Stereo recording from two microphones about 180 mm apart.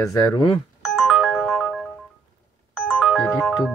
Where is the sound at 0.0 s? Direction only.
20° left (ahead or behind).